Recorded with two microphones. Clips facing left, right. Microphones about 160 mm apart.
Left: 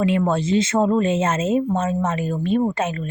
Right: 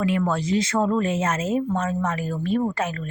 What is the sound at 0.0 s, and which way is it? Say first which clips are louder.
A woman's voice: left 3 dB; 25° left (ahead or behind).